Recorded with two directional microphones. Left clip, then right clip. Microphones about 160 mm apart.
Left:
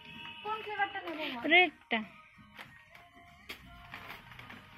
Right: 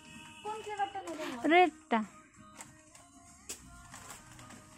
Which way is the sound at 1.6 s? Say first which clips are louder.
Right 1 dB; 45° right (ahead or behind).